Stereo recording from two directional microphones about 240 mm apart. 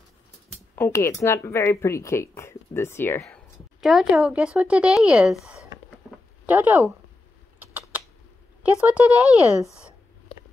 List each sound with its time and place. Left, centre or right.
0.7 s a woman's voice: centre
3.8 s speech: centre
7.5 s typing: centre
8.8 s speech: centre